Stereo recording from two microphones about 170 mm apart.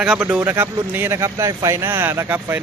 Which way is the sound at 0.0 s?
5° right (ahead or behind).